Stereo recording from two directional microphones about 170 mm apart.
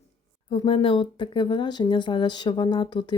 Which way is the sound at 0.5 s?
30° left (ahead or behind).